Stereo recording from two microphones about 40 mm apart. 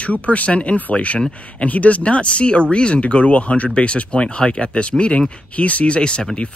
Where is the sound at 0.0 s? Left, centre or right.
Left.